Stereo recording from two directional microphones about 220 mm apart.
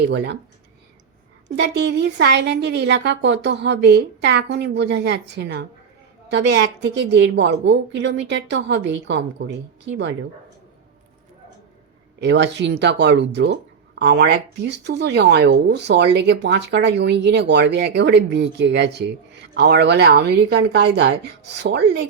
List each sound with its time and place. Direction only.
1.5 s speech: 50° right (ahead or behind)
12.2 s speech: 50° right (ahead or behind)